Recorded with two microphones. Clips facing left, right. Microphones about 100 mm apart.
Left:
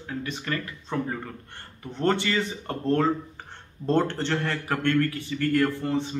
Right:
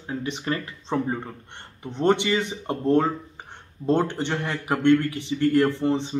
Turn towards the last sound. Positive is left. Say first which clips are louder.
# right 3 dB
turn(degrees=-20)  # may be behind; listen again after turning